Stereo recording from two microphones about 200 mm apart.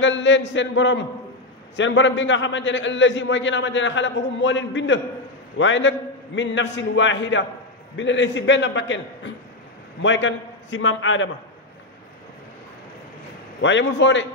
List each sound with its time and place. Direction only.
0.0 s a man's voice: 65° left (ahead or behind)
13.6 s a man's voice: 65° left (ahead or behind)